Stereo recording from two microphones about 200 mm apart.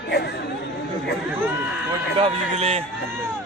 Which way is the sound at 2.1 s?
30° right (ahead or behind).